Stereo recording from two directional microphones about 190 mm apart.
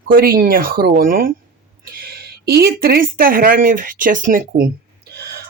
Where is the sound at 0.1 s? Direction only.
50° right (ahead or behind).